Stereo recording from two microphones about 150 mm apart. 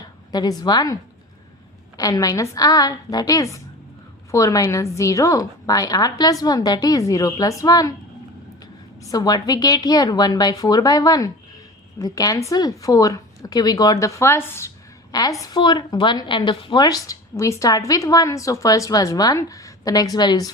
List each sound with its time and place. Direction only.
0.3 s a woman's voice: 25° left (ahead or behind)
2.0 s a woman's voice: 25° left (ahead or behind)